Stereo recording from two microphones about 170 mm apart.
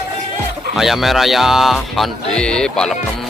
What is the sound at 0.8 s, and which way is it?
Music, centre (ahead or behind).